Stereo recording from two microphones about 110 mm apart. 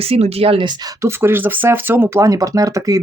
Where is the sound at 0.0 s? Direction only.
65° right (ahead or behind); by 0.9 s 40° right (ahead or behind).